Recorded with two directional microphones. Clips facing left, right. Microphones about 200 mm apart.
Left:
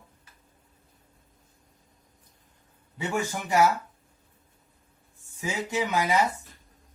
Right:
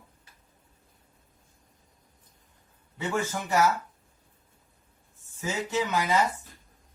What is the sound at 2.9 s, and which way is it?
Speech, 15° left (ahead or behind).